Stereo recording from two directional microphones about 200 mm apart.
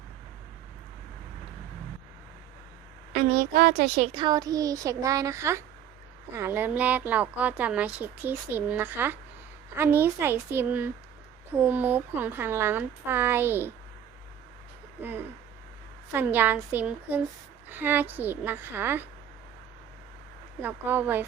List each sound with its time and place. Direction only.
3.1 s a woman's voice: 45° right (ahead or behind)
4.1 s speech: 20° right (ahead or behind)
16.1 s speech: 10° right (ahead or behind)
20.6 s speech: 10° right (ahead or behind)